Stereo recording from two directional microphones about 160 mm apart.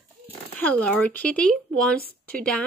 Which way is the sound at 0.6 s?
10° left (ahead or behind).